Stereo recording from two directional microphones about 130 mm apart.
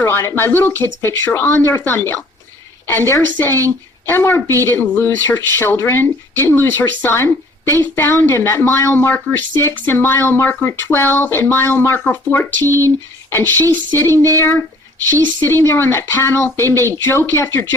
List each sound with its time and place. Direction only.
0.0 s speech: 20° left (ahead or behind)
15.4 s speech: 20° left (ahead or behind)